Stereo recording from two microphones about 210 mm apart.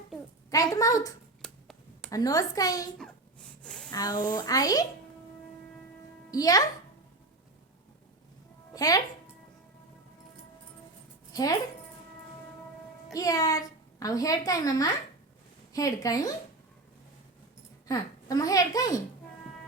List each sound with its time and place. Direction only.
0.5 s a woman's voice: 15° left (ahead or behind)
1.4 s tick-tock: centre (ahead or behind)
2.0 s a woman's voice: 15° left (ahead or behind)
3.6 s a sound: 5° left (ahead or behind)
3.9 s a woman's voice: 20° left (ahead or behind)
6.3 s a woman's voice: 15° left (ahead or behind)
8.7 s music: 15° left (ahead or behind)
11.3 s speech: 15° left (ahead or behind)
13.1 s a woman's voice: 15° left (ahead or behind)
17.8 s a woman's voice: 15° left (ahead or behind)